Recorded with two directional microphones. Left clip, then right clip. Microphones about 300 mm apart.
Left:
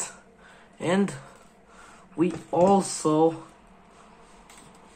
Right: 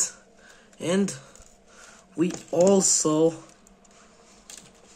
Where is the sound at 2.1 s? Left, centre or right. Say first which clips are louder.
Even; right.